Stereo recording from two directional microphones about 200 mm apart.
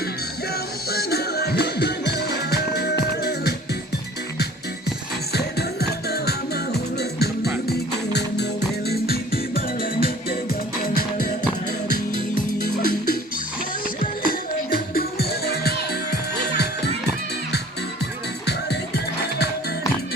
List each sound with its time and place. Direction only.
0.9 s music: 50° left (ahead or behind)
5.3 s music: 55° left (ahead or behind)
12.1 s music: 45° left (ahead or behind)